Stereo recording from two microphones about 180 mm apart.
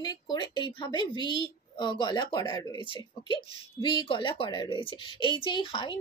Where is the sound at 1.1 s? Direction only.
25° right (ahead or behind).